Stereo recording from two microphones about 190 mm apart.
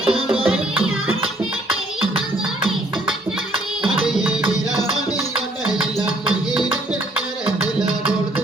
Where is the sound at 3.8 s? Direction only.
5° right (ahead or behind).